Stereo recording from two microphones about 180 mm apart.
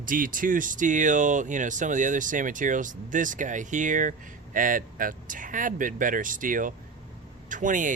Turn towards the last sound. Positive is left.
turn(degrees=-45)  # may be behind; listen again after turning